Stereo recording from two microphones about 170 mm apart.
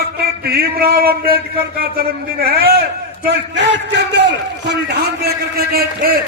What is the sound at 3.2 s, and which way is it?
A man's voice, 90° right.